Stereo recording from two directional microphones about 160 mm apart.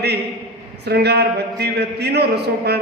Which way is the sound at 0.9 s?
90° right.